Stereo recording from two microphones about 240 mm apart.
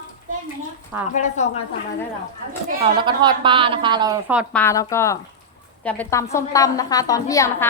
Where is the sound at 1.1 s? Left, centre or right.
Left.